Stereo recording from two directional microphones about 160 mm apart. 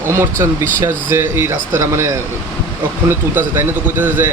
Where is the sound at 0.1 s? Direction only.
15° right (ahead or behind).